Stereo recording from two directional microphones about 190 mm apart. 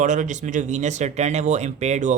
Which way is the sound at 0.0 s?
40° right (ahead or behind).